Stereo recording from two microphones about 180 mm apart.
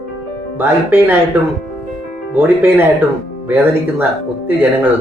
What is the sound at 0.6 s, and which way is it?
Speech, 10° right (ahead or behind).